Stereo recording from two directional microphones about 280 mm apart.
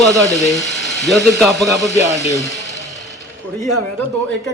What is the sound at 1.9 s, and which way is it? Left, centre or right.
Speech, left.